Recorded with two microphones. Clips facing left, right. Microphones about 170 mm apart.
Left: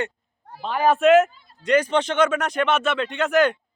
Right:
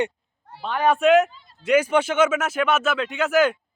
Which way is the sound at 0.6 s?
Centre (ahead or behind).